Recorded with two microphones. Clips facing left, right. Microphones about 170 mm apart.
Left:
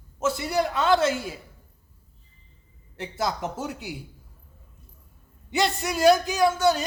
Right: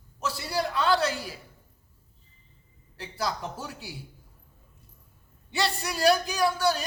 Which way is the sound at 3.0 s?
20° left (ahead or behind).